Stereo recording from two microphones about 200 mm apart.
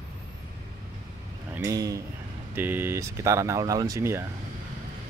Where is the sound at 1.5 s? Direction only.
15° right (ahead or behind).